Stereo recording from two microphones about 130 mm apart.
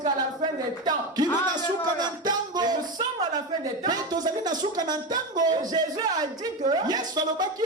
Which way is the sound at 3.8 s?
30° right (ahead or behind).